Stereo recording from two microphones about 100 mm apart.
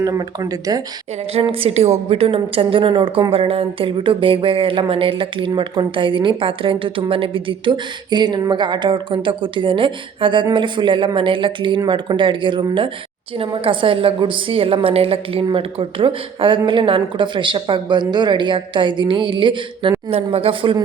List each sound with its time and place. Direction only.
0.0 s speech: 40° right (ahead or behind)
1.3 s a woman's voice: 70° right (ahead or behind); by 19.9 s 55° right (ahead or behind)
20.1 s a woman's voice: 85° right; by 20.7 s 60° right (ahead or behind)